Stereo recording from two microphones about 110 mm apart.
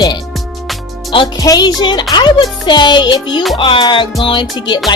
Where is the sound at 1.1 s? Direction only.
50° left (ahead or behind).